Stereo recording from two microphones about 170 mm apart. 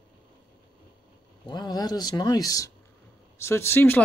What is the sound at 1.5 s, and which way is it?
Speech, 25° left (ahead or behind).